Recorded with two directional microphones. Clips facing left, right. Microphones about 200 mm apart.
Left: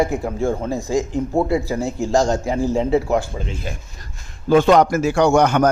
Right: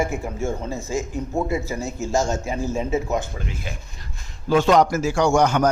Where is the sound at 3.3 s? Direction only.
25° left (ahead or behind).